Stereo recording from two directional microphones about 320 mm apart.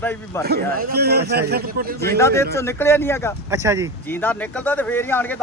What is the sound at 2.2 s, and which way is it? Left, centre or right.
Speech, centre.